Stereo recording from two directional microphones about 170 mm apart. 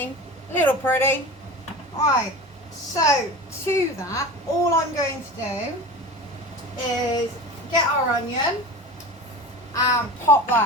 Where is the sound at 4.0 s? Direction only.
20° left (ahead or behind).